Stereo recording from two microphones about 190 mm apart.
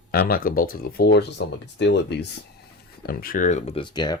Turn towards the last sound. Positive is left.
turn(degrees=20)  # may be behind; listen again after turning